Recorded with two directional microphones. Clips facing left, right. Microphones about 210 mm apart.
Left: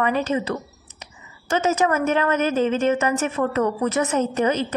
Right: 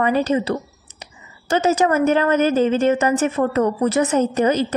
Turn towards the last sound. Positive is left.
turn(degrees=-40)  # may be behind; listen again after turning